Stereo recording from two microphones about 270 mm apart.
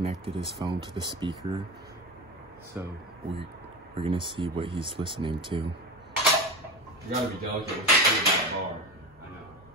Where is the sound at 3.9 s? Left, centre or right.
Centre.